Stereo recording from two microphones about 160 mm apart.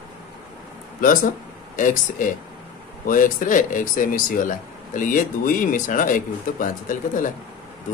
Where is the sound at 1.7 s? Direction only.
55° left (ahead or behind).